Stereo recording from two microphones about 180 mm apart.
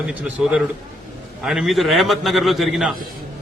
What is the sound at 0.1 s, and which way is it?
A man's voice, 10° right (ahead or behind).